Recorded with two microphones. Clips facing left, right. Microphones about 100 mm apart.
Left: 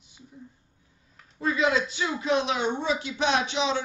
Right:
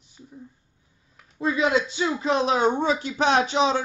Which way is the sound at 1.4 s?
25° right (ahead or behind).